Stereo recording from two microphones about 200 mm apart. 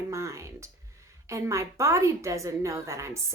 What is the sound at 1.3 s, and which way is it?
A woman's voice, 15° right (ahead or behind).